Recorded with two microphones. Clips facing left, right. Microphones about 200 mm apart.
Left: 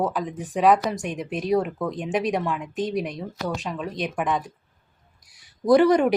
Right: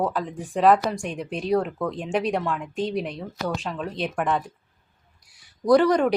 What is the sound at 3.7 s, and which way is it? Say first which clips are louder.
Speech: even; 5° left (ahead or behind).